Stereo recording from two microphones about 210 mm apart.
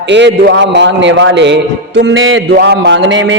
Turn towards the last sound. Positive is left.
turn(degrees=-60)  # may be behind; listen again after turning